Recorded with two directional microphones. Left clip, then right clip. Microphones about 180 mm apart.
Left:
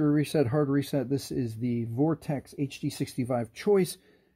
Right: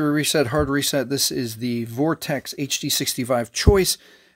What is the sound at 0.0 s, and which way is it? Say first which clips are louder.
Speech: right 6 dB; 20° right (ahead or behind).